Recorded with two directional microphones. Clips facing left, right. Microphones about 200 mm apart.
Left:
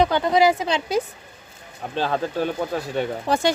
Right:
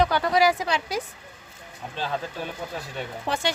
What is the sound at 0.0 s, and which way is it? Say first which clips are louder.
A woman's voice: left 3 dB; 20° left (ahead or behind).